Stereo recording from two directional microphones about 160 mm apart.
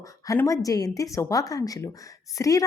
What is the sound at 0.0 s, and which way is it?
Speech, 20° left (ahead or behind).